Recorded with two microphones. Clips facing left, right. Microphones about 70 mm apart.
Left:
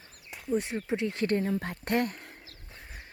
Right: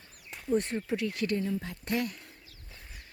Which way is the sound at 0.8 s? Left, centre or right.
Left.